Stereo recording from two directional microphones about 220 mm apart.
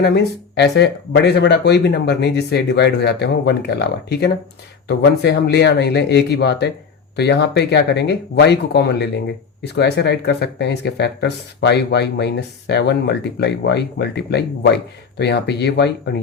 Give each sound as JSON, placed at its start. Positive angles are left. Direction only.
{"t": 0.0, "sound": "speech", "side_deg": 50}